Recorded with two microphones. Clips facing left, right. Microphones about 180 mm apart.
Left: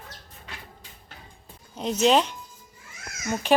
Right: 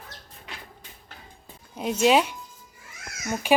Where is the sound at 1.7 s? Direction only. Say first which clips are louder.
Even; 10° right (ahead or behind).